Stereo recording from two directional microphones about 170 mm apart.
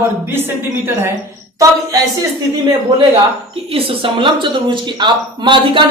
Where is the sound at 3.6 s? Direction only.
35° right (ahead or behind).